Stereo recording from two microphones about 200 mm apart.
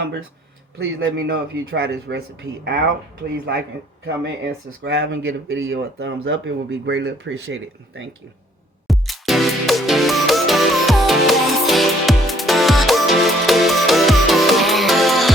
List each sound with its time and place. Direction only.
0.0 s speech: 70° right (ahead or behind)
0.9 s speech: 55° right (ahead or behind)
4.8 s speech: 60° right (ahead or behind)
8.9 s music: centre (ahead or behind)